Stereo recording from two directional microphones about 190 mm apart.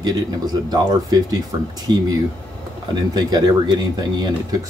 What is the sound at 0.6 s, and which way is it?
Speech, 20° right (ahead or behind).